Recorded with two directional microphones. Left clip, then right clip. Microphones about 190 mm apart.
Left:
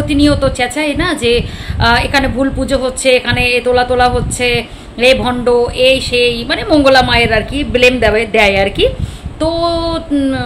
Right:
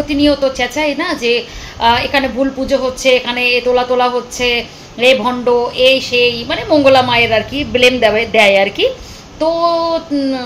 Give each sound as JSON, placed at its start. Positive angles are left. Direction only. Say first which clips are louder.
{"t": 0.1, "sound": "a woman's voice", "louder": "left 1 dB", "side_deg": 15}